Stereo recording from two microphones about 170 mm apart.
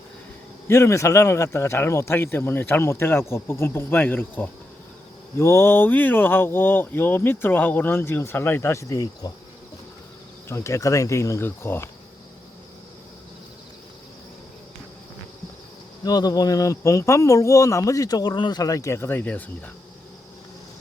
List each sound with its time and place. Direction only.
0.7 s speech: 15° left (ahead or behind)
10.5 s speech: 15° left (ahead or behind)
16.0 s speech: 25° left (ahead or behind)